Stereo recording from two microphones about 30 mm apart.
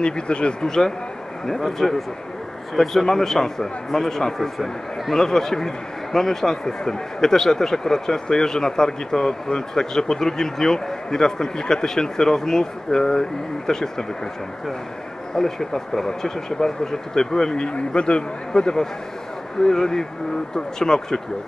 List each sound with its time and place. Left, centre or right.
0.0 s speech: left
0.7 s a man's voice: centre
4.4 s a man's voice: centre
5.1 s a man's voice: centre
15.3 s a man's voice: centre; by 18.2 s left
18.5 s a man's voice: left